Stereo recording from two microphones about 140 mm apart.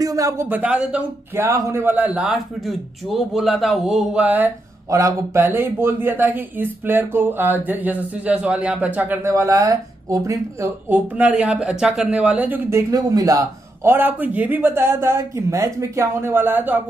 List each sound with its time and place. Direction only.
0.0 s speech: 25° right (ahead or behind)
4.8 s speech: 20° right (ahead or behind)